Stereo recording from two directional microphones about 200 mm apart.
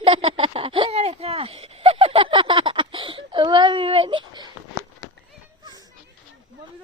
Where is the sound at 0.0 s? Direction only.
30° right (ahead or behind).